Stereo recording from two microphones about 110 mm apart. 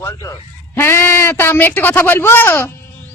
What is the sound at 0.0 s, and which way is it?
Speech, 25° left (ahead or behind).